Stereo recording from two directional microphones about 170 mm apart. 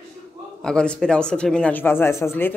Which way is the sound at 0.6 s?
5° left (ahead or behind).